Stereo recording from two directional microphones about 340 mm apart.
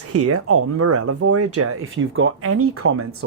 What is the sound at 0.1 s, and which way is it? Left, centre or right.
Speech, right.